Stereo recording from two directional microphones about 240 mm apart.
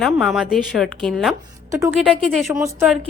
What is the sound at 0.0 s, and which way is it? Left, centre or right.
A woman's voice, centre.